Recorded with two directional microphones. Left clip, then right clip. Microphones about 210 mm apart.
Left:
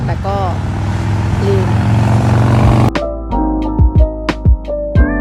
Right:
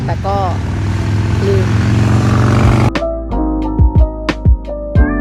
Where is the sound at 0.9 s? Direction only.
30° left (ahead or behind).